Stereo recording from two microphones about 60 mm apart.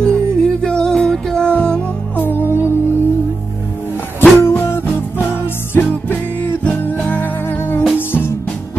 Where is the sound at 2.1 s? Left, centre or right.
Left.